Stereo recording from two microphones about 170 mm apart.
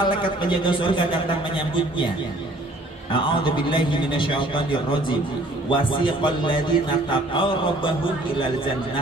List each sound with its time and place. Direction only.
0.0 s a man's voice: 30° left (ahead or behind)
3.1 s a man's voice: 30° left (ahead or behind)